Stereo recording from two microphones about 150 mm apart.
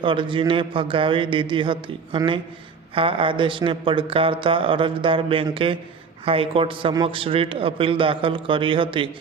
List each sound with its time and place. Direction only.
0.0 s a man's voice: 35° right (ahead or behind)